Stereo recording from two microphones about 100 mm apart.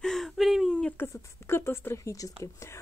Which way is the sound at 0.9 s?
25° left (ahead or behind).